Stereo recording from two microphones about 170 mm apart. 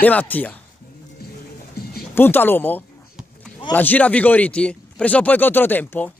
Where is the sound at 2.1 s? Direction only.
10° left (ahead or behind).